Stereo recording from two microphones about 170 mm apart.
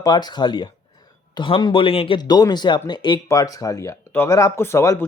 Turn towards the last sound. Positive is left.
turn(degrees=15)  # may be behind; listen again after turning